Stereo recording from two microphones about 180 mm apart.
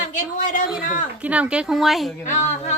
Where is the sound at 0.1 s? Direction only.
45° left (ahead or behind).